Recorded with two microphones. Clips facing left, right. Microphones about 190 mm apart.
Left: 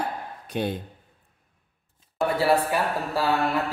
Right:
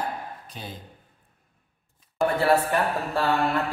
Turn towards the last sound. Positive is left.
turn(degrees=5)  # may be behind; listen again after turning